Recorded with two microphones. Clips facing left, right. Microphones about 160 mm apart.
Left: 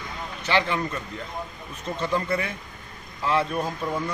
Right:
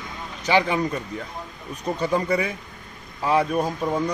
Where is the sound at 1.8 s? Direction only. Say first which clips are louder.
Right 3 dB; 10° right (ahead or behind).